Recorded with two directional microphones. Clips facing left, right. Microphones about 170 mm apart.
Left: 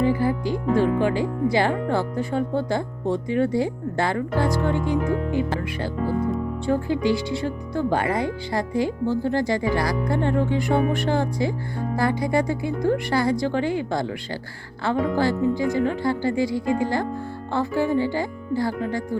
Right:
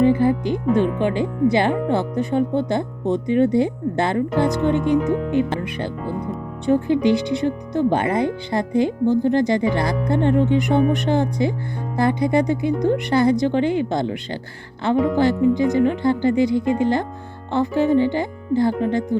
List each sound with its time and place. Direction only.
0.0 s speech: 20° right (ahead or behind)